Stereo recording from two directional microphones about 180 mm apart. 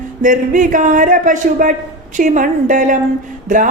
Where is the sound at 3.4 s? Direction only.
45° right (ahead or behind).